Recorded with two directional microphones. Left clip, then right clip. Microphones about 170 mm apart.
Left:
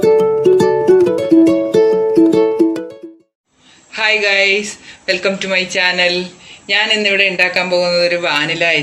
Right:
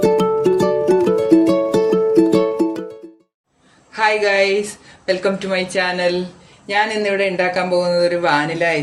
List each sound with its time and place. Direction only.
0.0 s music: centre (ahead or behind)
3.9 s a woman's voice: 30° right (ahead or behind)
4.5 s speech: centre (ahead or behind)
5.0 s speech: 30° right (ahead or behind)